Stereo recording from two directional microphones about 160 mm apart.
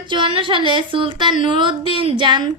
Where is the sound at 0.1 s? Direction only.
30° right (ahead or behind).